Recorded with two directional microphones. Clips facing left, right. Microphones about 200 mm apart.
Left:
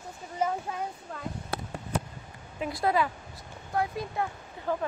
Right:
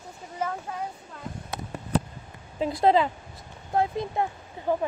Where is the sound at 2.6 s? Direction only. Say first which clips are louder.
Right 6 dB; 25° right (ahead or behind).